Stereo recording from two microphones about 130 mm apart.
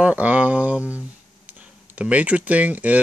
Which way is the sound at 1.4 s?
10° right (ahead or behind).